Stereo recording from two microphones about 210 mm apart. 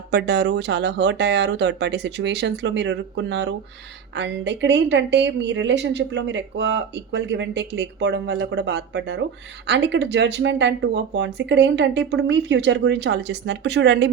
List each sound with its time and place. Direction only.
0.1 s a woman's voice: 50° right (ahead or behind)